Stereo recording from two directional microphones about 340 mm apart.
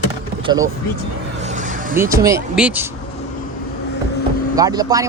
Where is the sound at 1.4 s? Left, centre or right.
Right.